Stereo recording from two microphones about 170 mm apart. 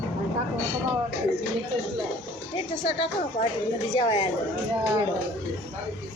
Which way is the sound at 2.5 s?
35° left (ahead or behind).